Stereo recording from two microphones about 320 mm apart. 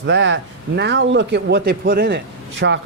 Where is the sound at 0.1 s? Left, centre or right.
Right.